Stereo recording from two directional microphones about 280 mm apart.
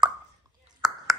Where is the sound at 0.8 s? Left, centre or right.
Centre.